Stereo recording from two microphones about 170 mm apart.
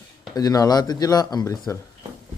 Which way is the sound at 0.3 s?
20° left (ahead or behind).